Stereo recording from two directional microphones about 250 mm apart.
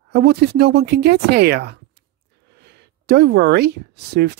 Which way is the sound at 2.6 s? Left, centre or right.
Right.